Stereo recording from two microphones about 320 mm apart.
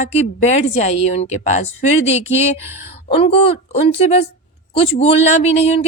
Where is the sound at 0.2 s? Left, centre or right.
Centre.